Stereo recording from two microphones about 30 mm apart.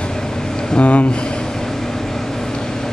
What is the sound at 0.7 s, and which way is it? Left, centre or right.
Speech, left.